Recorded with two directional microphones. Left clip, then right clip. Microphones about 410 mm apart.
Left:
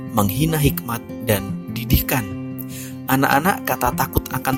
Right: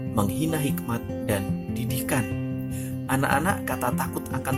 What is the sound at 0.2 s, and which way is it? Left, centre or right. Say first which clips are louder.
Speech: left 6 dB; centre.